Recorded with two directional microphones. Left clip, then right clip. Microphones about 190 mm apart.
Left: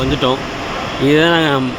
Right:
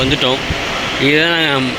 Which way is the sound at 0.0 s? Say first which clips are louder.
Right 2 dB; 15° left (ahead or behind).